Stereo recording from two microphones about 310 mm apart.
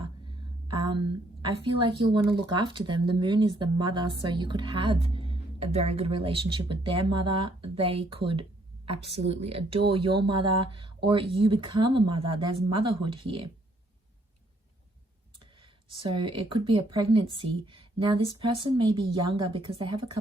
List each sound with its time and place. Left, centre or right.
0.3 s a woman's voice: centre
16.0 s speech: centre